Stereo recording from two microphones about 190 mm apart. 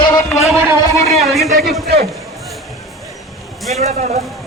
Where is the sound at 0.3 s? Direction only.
Centre (ahead or behind).